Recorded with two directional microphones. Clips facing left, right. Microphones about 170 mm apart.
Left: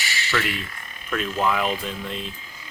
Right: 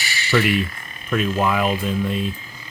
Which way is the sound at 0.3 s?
15° right (ahead or behind).